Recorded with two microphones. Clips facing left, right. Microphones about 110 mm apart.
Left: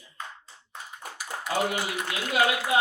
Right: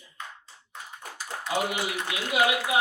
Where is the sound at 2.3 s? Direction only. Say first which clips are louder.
Even; 10° right (ahead or behind).